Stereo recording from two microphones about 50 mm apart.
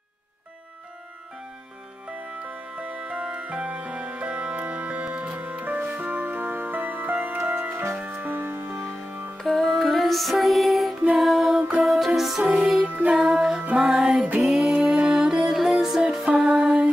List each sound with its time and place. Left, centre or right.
2.0 s music: right
8.0 s music: right
9.4 s music: centre
12.6 s music: right
13.3 s music: centre
14.1 s music: right
14.4 s music: centre
16.3 s music: centre